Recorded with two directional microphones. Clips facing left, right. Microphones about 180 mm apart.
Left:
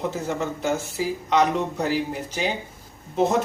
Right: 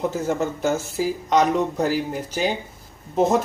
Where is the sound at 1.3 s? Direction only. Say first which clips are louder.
Right 2 dB; 40° right (ahead or behind).